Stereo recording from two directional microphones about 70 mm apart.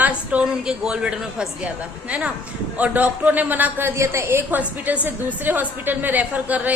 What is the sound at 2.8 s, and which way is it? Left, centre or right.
Speech, right.